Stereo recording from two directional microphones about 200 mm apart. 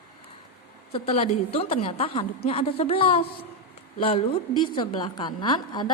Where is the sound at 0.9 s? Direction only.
30° left (ahead or behind).